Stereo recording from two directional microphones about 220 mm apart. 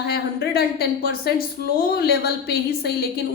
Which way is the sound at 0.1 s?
45° left (ahead or behind).